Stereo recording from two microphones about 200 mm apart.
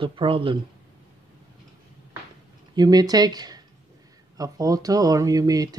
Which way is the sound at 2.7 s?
20° right (ahead or behind).